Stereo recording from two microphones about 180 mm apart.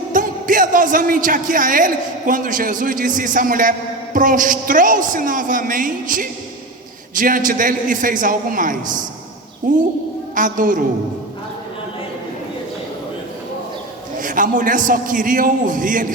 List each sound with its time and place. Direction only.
0.1 s a man's voice: 50° right (ahead or behind)
14.2 s a man's voice: 50° right (ahead or behind)